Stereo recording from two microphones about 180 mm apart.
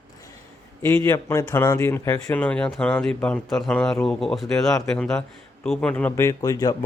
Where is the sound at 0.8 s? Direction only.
15° left (ahead or behind).